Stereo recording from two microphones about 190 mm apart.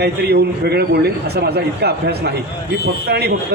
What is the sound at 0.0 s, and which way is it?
A man's voice, 60° right (ahead or behind).